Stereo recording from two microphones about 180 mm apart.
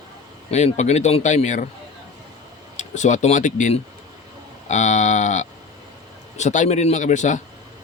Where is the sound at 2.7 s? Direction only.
40° left (ahead or behind).